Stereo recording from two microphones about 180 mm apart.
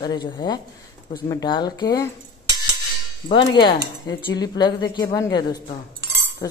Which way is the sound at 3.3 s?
25° left (ahead or behind).